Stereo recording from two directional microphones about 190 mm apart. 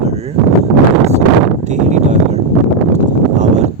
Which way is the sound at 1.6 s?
40° right (ahead or behind).